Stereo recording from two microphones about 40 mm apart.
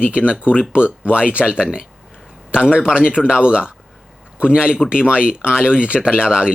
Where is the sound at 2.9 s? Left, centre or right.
Right.